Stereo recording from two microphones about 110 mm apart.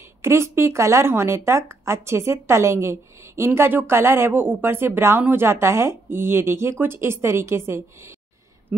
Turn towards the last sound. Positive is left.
turn(degrees=-25)  # may be behind; listen again after turning